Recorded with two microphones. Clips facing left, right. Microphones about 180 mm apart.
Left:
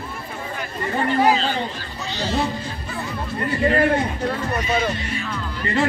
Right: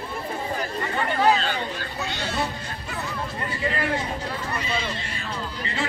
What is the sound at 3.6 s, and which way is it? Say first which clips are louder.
Speech: left 9 dB; 55° left (ahead or behind).